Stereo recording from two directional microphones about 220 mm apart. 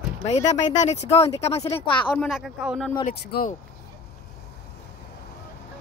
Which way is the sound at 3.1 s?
45° left (ahead or behind).